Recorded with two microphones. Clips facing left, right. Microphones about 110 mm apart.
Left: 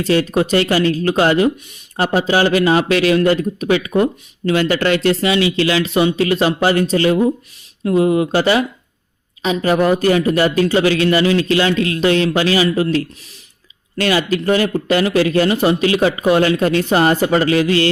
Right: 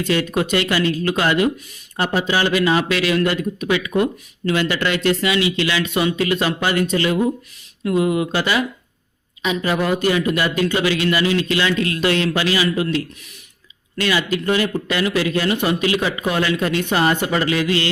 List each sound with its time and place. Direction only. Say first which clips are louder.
0.0 s a man's voice: left 4 dB; 35° left (ahead or behind)
9.6 s a man's voice: left 6 dB; 35° left (ahead or behind)
14.0 s a man's voice: left 4 dB; 35° left (ahead or behind)